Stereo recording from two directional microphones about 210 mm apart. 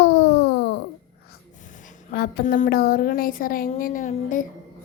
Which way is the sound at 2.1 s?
45° left (ahead or behind).